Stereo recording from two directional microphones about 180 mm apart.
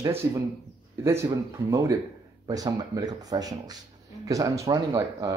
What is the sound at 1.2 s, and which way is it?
Speech, 20° right (ahead or behind).